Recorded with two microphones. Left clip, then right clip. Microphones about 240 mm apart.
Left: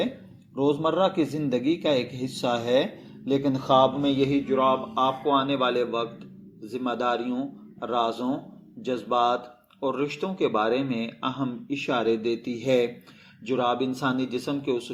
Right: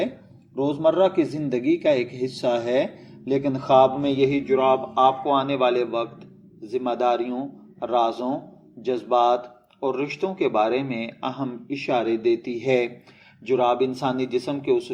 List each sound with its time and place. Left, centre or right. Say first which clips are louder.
0.5 s a man's voice: right 3 dB; left